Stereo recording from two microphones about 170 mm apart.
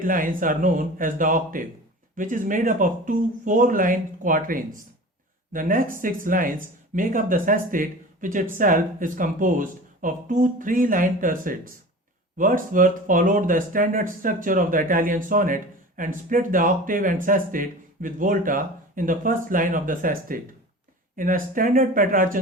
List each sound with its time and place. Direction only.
0.0 s speech: 55° right (ahead or behind)